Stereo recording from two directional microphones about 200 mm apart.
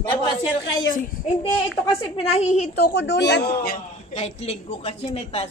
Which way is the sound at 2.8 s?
60° left (ahead or behind).